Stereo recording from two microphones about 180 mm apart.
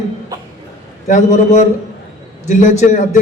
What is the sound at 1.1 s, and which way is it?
A man's voice, 40° left (ahead or behind).